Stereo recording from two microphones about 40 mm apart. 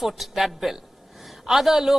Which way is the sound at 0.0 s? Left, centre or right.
Centre.